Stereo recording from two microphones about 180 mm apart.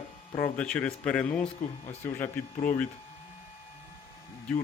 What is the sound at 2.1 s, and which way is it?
Speech, 15° left (ahead or behind).